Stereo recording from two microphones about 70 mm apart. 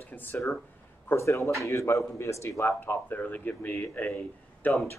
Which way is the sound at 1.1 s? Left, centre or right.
Left.